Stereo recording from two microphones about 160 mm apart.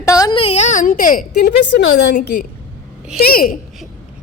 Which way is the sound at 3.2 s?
65° left (ahead or behind).